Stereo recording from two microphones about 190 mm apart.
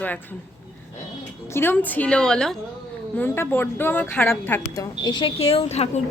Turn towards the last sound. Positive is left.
turn(degrees=35)  # may be behind; listen again after turning